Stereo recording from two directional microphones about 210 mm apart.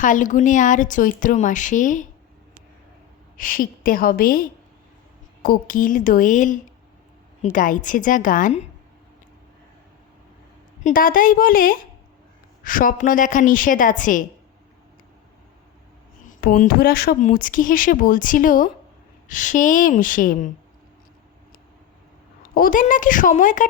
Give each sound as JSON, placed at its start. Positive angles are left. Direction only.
{"t": 0.0, "sound": "speech", "side_deg": 40}
{"t": 3.3, "sound": "a woman's voice", "side_deg": 40}
{"t": 10.8, "sound": "speech", "side_deg": 40}
{"t": 16.2, "sound": "speech", "side_deg": 40}
{"t": 22.5, "sound": "speech", "side_deg": 40}